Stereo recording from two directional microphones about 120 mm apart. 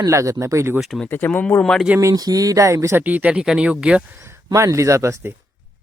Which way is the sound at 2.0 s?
30° right (ahead or behind).